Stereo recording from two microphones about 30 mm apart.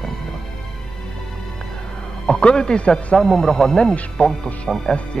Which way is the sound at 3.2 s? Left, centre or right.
Centre.